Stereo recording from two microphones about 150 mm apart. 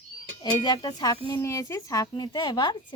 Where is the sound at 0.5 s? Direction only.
25° left (ahead or behind).